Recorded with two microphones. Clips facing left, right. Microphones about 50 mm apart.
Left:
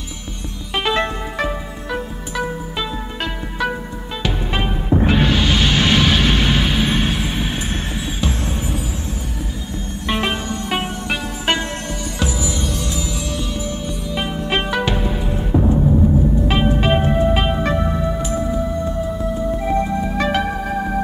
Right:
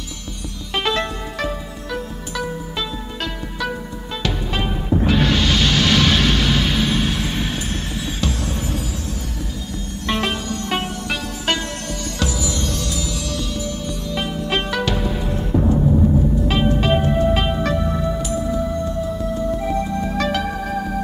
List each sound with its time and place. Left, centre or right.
0.7 s music: centre
10.0 s music: centre
16.4 s music: centre